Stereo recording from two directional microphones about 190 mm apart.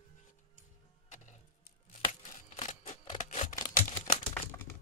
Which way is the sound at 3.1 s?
35° left (ahead or behind).